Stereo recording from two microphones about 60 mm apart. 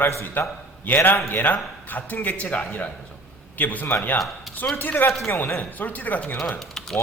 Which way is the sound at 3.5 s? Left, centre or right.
Left.